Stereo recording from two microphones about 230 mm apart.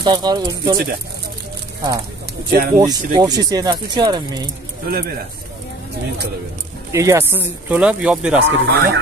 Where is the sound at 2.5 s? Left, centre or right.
Right.